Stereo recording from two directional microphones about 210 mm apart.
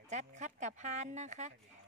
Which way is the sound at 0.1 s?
35° right (ahead or behind).